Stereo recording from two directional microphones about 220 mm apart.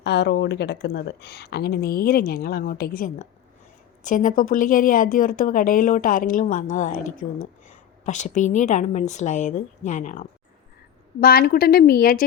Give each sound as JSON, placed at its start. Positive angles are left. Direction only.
{"t": 0.0, "sound": "speech", "side_deg": 50}